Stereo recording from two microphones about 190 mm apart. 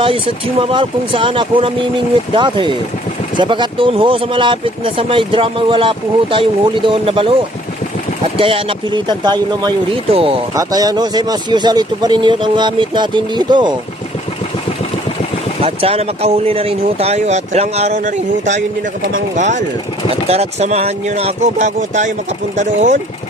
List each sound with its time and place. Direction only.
0.0 s speech: 30° right (ahead or behind)
8.4 s speech: 30° right (ahead or behind)
10.5 s speech: 20° right (ahead or behind)
15.6 s speech: 30° right (ahead or behind)